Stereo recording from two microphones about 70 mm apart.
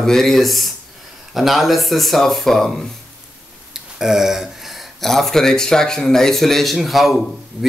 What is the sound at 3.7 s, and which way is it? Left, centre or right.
Speech, centre.